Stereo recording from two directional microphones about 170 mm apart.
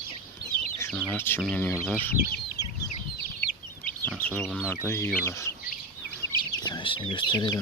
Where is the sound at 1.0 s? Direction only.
10° left (ahead or behind).